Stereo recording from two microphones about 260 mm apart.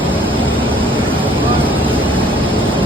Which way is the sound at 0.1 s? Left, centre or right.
Centre.